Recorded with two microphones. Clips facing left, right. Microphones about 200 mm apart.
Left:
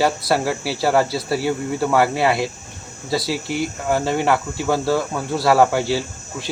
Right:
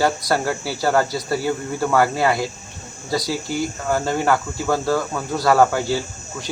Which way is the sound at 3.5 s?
70° left (ahead or behind).